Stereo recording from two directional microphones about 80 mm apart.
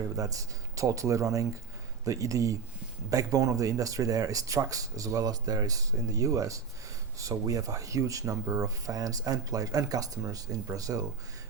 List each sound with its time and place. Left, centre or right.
0.2 s speech: right